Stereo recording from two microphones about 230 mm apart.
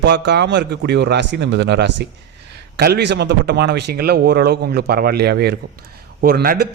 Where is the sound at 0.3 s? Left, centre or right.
Right.